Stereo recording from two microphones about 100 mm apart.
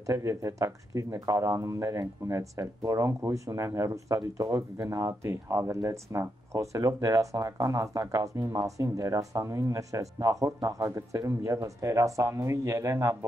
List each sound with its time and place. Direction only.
0.0 s speech: 30° right (ahead or behind)